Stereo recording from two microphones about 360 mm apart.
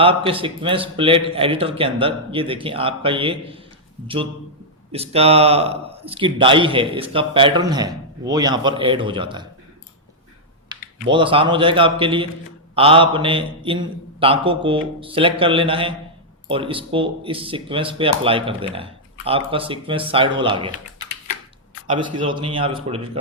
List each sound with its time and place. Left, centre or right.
0.0 s speech: centre
4.9 s speech: centre
11.1 s speech: centre
21.8 s speech: centre